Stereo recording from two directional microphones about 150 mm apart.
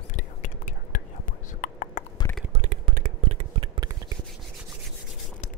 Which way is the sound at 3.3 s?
40° right (ahead or behind).